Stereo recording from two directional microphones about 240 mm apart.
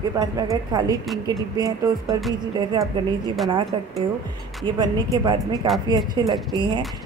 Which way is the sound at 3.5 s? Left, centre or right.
Right.